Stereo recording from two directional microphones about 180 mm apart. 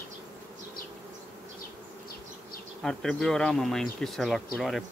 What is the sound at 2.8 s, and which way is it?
Speech, 5° left (ahead or behind).